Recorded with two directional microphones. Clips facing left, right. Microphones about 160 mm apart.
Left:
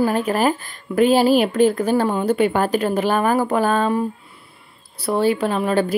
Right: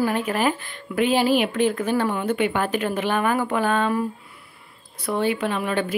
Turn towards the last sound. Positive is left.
turn(degrees=35)  # may be behind; listen again after turning